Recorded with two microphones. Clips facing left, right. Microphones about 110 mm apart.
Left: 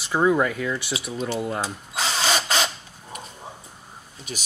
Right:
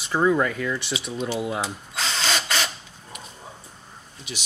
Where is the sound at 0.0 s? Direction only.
10° left (ahead or behind).